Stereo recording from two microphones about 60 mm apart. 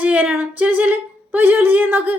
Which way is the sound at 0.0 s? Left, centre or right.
Right.